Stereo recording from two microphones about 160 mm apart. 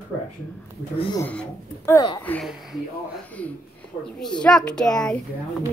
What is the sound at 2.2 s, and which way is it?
Speech, 10° left (ahead or behind).